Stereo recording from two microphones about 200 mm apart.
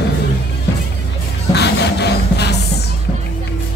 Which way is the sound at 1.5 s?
60° left (ahead or behind).